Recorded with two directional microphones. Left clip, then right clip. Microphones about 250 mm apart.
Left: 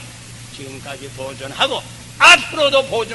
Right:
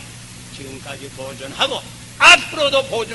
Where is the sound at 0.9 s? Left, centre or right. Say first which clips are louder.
Left 2 dB; centre.